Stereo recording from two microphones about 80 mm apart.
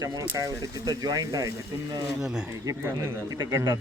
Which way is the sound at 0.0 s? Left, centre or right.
Right.